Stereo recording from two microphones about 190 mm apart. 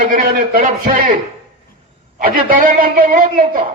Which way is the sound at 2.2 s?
50° right (ahead or behind).